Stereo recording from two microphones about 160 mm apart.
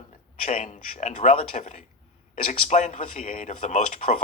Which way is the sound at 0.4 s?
45° left (ahead or behind).